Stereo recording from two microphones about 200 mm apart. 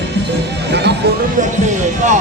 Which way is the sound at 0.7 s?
55° right (ahead or behind).